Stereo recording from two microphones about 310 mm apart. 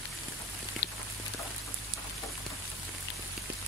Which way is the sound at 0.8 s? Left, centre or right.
Left.